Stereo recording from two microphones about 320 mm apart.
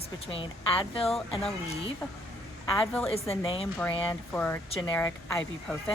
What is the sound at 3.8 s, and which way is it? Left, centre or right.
Speech, centre.